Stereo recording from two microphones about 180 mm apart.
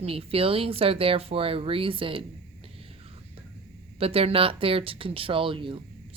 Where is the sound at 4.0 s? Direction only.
35° right (ahead or behind).